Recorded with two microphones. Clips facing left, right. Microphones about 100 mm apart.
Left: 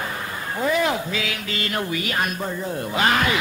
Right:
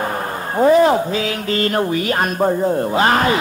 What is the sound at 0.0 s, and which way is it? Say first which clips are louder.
A man's voice: right 7 dB; 45° right (ahead or behind).